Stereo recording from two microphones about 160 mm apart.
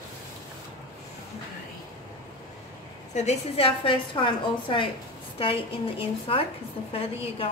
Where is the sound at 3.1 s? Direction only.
40° left (ahead or behind).